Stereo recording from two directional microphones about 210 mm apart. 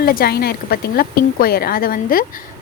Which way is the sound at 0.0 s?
45° left (ahead or behind).